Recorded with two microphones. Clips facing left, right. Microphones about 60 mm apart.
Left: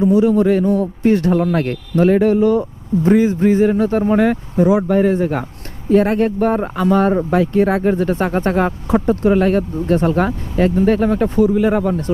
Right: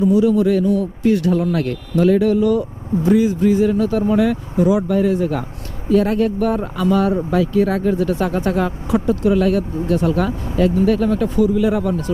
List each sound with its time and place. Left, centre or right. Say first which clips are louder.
0.0 s a man's voice: left 1 dB; left